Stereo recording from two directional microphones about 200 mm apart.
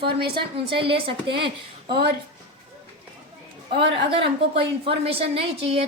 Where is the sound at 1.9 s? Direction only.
50° right (ahead or behind).